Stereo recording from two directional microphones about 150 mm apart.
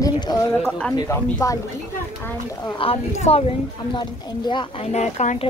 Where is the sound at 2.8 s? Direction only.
40° left (ahead or behind).